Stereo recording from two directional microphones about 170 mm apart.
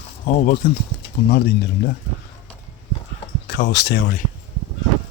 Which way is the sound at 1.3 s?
70° left (ahead or behind).